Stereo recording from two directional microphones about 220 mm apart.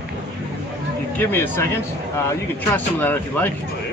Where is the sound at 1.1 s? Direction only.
10° left (ahead or behind).